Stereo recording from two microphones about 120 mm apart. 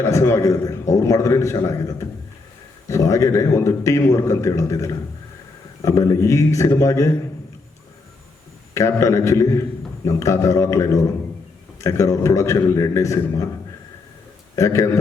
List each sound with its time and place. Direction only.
0.0 s a man's voice: 20° left (ahead or behind)
8.7 s a man's voice: 25° left (ahead or behind)
14.5 s a man's voice: 25° left (ahead or behind)